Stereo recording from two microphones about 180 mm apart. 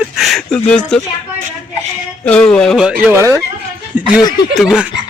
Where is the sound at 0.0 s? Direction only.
Centre (ahead or behind).